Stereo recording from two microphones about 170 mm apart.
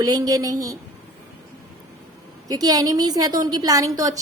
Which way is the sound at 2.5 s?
20° right (ahead or behind).